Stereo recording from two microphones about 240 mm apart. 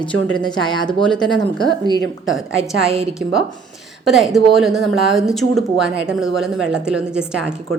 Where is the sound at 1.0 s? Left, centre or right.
Centre.